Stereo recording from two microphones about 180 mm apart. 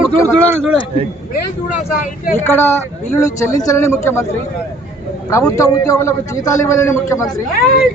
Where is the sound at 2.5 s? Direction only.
15° left (ahead or behind).